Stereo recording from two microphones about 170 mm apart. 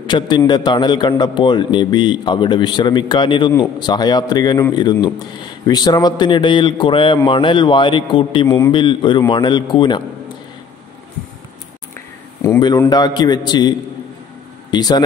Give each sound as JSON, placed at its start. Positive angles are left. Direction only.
{"t": 0.0, "sound": "a man's voice", "side_deg": 25}
{"t": 12.4, "sound": "a man's voice", "side_deg": 20}